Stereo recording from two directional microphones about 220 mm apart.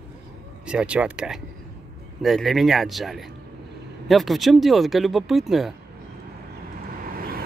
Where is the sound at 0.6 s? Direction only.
5° right (ahead or behind).